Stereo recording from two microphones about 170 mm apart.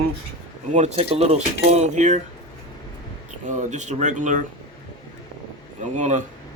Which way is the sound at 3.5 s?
45° right (ahead or behind).